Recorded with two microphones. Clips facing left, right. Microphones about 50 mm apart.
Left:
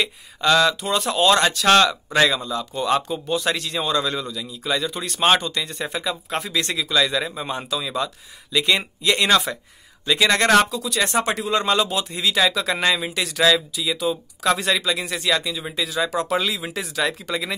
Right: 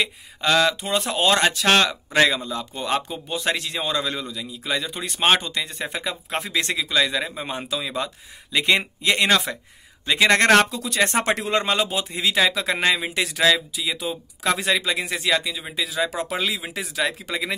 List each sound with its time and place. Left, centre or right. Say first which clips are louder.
0.0 s a man's voice: left 2 dB; centre
10.3 s speech: right 1 dB; right
11.2 s speech: even; right
11.6 s a man's voice: left 2 dB; right